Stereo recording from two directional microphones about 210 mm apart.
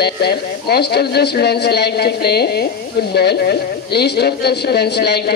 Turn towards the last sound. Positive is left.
turn(degrees=50)  # may be behind; listen again after turning